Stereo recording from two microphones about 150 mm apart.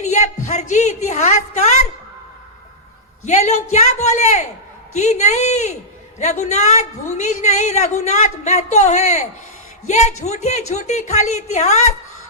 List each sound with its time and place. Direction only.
0.0 s a woman's voice: 50° left (ahead or behind)
3.2 s a woman's voice: 50° left (ahead or behind)